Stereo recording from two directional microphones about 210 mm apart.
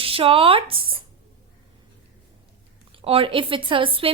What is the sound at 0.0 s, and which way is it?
Speech, 25° right (ahead or behind).